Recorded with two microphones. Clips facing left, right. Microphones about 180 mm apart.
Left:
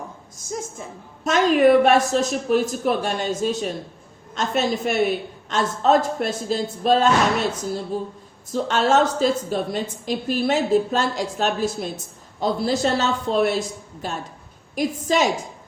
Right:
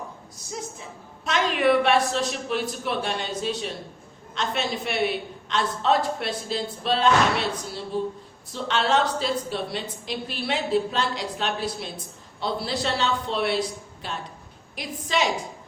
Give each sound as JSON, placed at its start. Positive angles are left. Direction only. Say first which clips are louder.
{"t": 0.3, "sound": "a woman's voice", "louder": "left 5 dB", "side_deg": 45}